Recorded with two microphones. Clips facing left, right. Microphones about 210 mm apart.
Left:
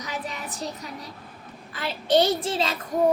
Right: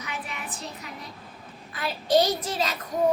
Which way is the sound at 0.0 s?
40° left (ahead or behind).